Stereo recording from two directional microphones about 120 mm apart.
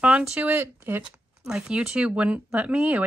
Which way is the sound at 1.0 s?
5° right (ahead or behind).